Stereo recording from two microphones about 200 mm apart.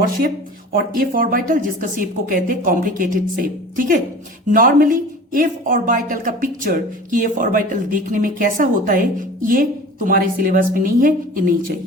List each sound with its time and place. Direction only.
0.0 s speech: 45° right (ahead or behind)